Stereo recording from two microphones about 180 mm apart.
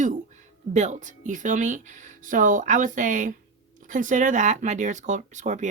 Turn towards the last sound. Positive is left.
turn(degrees=-45)  # may be behind; listen again after turning